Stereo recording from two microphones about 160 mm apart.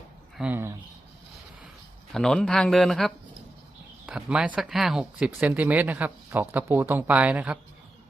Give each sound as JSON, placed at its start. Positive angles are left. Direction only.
{"t": 0.3, "sound": "speech", "side_deg": -10}
{"t": 2.1, "sound": "speech", "side_deg": 5}